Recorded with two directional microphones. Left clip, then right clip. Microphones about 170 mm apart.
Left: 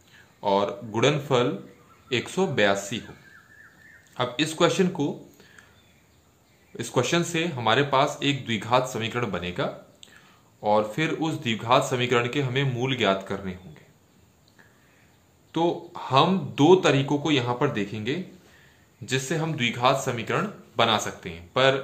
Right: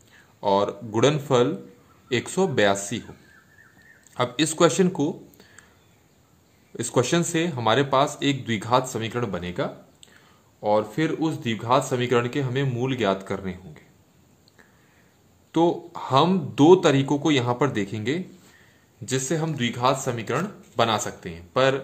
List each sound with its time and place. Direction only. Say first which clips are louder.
0.1 s speech: right 2 dB; 30° right (ahead or behind)
4.1 s speech: right 2 dB; 35° right (ahead or behind)
6.8 s speech: right 2 dB; 30° right (ahead or behind)
15.5 s speech: right 3 dB; 35° right (ahead or behind)